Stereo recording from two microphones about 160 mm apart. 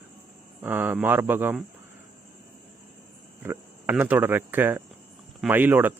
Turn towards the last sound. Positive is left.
turn(degrees=-10)  # may be behind; listen again after turning